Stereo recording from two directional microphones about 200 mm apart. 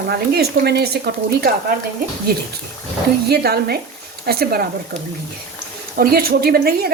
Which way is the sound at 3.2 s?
50° right (ahead or behind).